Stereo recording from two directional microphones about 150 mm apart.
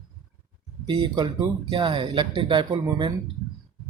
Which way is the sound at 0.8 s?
35° right (ahead or behind).